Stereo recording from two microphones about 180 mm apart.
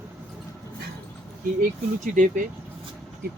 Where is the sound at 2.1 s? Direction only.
45° right (ahead or behind).